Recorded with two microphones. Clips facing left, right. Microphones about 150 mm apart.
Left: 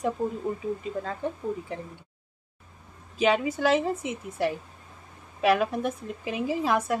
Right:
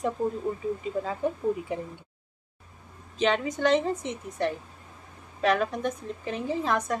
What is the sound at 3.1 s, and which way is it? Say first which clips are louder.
A woman's voice: left 2 dB; 10° left (ahead or behind).